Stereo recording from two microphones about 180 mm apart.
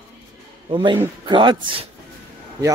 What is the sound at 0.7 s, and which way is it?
Speech, 25° right (ahead or behind).